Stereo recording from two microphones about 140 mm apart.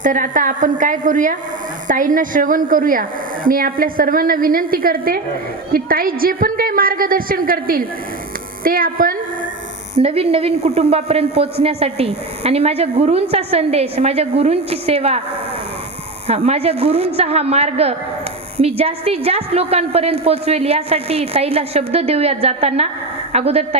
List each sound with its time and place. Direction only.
0.0 s a woman's voice: 65° right (ahead or behind); by 9.1 s 90° right
9.9 s a woman's voice: 45° right (ahead or behind)
16.2 s a woman's voice: 50° right (ahead or behind)